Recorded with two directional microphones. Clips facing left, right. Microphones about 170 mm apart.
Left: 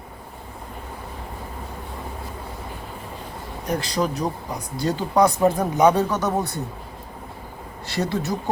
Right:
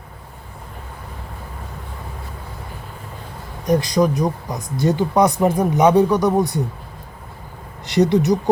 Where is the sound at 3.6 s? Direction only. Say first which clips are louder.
Right 7 dB; 15° right (ahead or behind).